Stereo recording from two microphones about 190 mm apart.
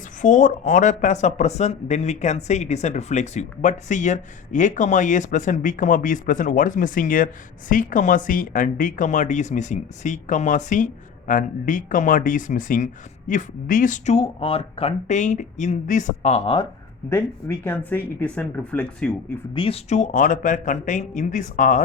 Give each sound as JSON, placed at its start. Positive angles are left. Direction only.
{"t": 0.2, "sound": "speech", "side_deg": 40}
{"t": 17.1, "sound": "speech", "side_deg": 10}
{"t": 19.5, "sound": "speech", "side_deg": 30}